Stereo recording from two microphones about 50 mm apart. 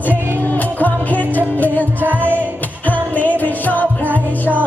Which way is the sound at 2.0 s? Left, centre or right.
Right.